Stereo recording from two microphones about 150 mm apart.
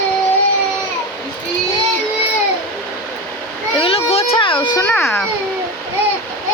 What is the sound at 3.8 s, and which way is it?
Speech, 40° left (ahead or behind).